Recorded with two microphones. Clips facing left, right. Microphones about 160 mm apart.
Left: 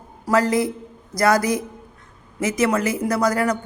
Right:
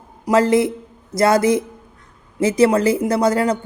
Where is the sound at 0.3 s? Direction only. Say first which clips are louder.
Right 4 dB; 25° right (ahead or behind).